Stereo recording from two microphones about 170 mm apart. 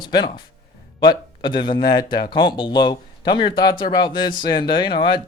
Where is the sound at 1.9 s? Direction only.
55° left (ahead or behind).